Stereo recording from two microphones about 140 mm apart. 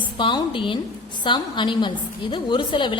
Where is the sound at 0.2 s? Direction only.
35° left (ahead or behind).